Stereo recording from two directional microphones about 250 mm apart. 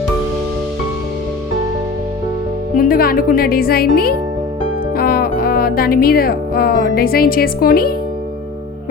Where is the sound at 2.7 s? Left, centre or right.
Left.